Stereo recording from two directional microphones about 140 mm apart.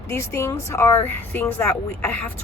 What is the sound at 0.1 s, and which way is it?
Speech, 20° left (ahead or behind).